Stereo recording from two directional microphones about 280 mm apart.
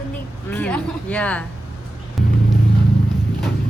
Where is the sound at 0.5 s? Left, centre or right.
Centre.